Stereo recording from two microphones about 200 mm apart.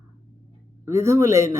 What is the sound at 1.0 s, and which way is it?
Speech, 15° right (ahead or behind).